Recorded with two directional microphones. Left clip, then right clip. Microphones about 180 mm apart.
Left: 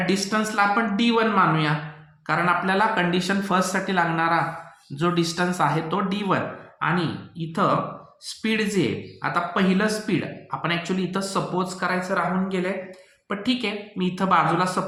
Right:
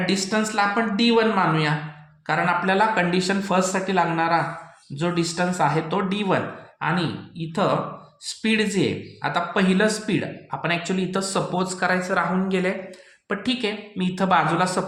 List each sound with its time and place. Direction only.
0.0 s speech: 20° right (ahead or behind)
8.4 s speech: 20° right (ahead or behind); by 12.7 s 50° right (ahead or behind)
13.2 s speech: 35° right (ahead or behind)